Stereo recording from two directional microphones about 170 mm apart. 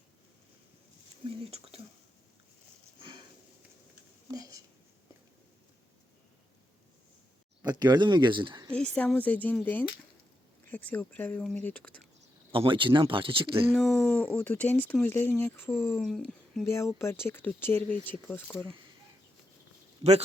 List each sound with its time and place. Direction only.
1.2 s speech: 35° right (ahead or behind)
4.4 s a sound: 20° right (ahead or behind)
7.6 s speech: 25° right (ahead or behind)
9.0 s speech: 10° left (ahead or behind)
12.5 s speech: 30° right (ahead or behind)
13.7 s speech: centre (ahead or behind)
16.0 s speech: 5° left (ahead or behind)
16.6 s speech: 15° left (ahead or behind)
20.0 s speech: 35° right (ahead or behind)